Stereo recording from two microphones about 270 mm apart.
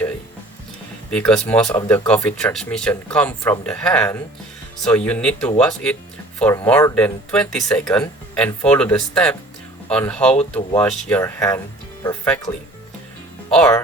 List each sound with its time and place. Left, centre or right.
1.1 s speech: centre
13.5 s speech: centre